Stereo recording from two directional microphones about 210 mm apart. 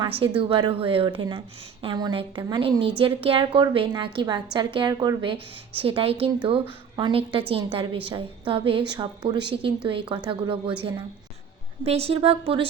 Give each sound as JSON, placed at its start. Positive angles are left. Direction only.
{"t": 0.2, "sound": "a woman's voice", "side_deg": -25}
{"t": 11.9, "sound": "a woman's voice", "side_deg": -30}